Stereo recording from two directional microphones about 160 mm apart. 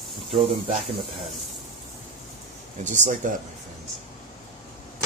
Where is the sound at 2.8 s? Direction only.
50° right (ahead or behind).